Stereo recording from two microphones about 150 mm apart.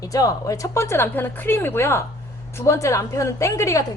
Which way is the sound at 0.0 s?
20° left (ahead or behind).